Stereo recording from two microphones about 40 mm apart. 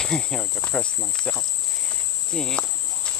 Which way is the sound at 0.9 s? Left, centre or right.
Centre.